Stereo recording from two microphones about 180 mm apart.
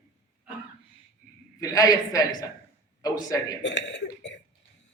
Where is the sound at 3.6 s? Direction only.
80° left.